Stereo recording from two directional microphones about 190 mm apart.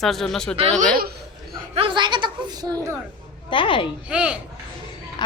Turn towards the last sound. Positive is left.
turn(degrees=20)  # may be behind; listen again after turning